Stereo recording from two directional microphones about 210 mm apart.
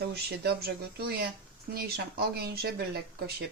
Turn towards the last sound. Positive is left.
turn(degrees=-50)  # may be behind; listen again after turning